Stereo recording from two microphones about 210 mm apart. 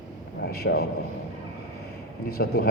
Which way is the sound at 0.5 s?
50° left (ahead or behind).